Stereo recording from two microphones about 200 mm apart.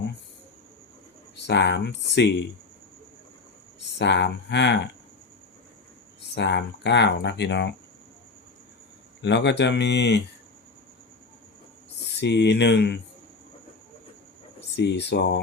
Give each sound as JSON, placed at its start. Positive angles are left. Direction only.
{"t": 1.4, "sound": "speech", "side_deg": 60}
{"t": 3.9, "sound": "speech", "side_deg": 60}
{"t": 6.3, "sound": "speech", "side_deg": 55}
{"t": 9.2, "sound": "speech", "side_deg": 60}
{"t": 12.2, "sound": "speech", "side_deg": 60}
{"t": 14.8, "sound": "speech", "side_deg": 60}